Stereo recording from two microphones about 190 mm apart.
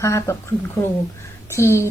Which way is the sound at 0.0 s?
15° left (ahead or behind).